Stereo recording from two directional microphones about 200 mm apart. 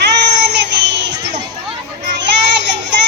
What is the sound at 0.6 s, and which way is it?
Child singing, 60° right (ahead or behind).